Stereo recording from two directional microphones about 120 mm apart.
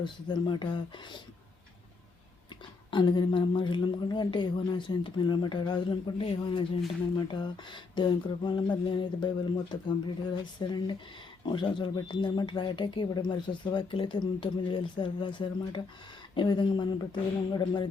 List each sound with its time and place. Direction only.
0.0 s speech: 40° left (ahead or behind)
2.9 s speech: 40° left (ahead or behind)